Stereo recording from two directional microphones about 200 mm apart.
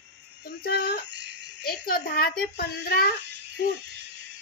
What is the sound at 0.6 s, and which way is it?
Speech, 55° left (ahead or behind).